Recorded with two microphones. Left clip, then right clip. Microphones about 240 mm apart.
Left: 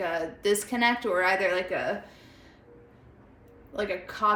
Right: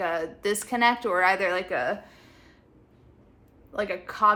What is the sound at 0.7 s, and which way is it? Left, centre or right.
Speech, centre.